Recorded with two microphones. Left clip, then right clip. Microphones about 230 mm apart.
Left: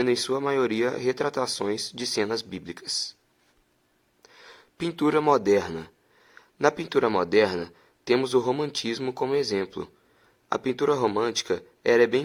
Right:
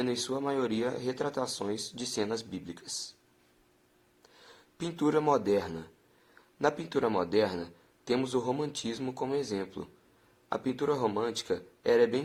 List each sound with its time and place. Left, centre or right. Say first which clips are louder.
0.0 s a man's voice: left 8 dB; left
1.9 s speech: left 7 dB; left
2.1 s a man's voice: left 6 dB; left
4.2 s a man's voice: left 7 dB; left